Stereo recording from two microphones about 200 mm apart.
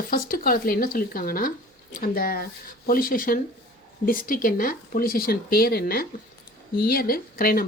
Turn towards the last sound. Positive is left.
turn(degrees=50)  # may be behind; listen again after turning